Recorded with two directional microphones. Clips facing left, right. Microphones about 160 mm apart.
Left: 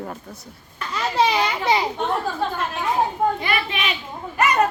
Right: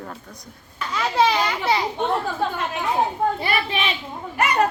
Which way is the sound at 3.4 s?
35° right (ahead or behind).